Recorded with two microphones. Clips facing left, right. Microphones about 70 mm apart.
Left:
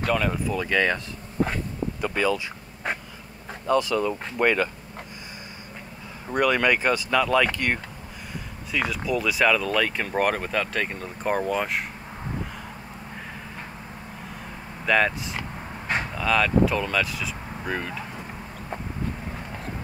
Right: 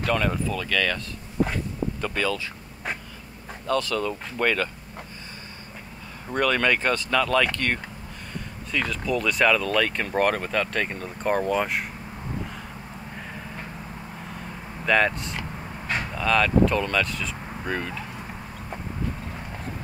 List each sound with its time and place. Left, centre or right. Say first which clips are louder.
0.0 s speech: even; centre
0.5 s speech: left 3 dB; left
2.0 s a sound: left 4 dB; centre
3.6 s speech: left 3 dB; centre
6.2 s speech: left 1 dB; centre
14.9 s speech: even; centre